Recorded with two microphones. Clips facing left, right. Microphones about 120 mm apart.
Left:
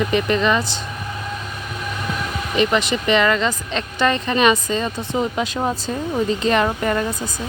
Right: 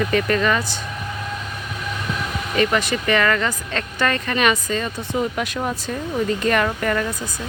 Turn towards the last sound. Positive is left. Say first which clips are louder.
# left 1 dB
turn(degrees=25)  # may be behind; listen again after turning